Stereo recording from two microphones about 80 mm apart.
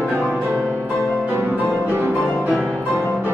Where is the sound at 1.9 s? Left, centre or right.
Right.